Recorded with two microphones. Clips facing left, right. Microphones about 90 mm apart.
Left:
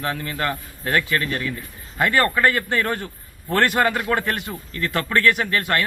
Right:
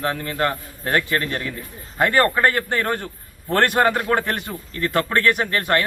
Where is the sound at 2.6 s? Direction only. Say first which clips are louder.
Even; 25° right (ahead or behind).